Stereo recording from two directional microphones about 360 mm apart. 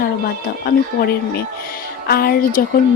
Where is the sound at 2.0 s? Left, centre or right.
Left.